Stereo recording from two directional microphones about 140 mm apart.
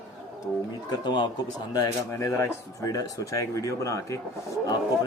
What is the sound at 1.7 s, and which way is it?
Speech, 20° left (ahead or behind).